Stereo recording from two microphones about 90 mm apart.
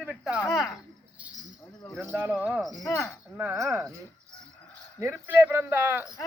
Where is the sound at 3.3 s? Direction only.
30° right (ahead or behind).